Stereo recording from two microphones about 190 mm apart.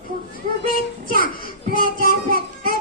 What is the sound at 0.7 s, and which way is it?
Child singing, 50° left (ahead or behind).